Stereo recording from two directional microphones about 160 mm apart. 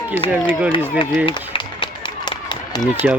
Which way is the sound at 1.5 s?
30° left (ahead or behind).